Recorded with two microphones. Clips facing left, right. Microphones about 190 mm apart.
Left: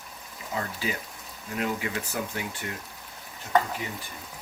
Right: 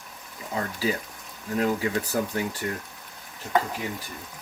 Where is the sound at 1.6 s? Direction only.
35° right (ahead or behind).